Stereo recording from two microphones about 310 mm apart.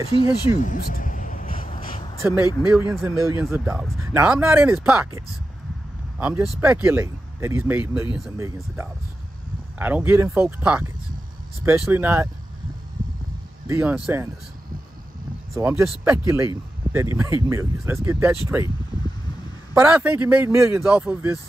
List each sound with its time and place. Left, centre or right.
0.1 s a sound: left
2.4 s speech: centre
2.9 s a man's voice: centre
13.7 s a man's voice: centre
15.5 s a man's voice: centre
19.7 s a man's voice: centre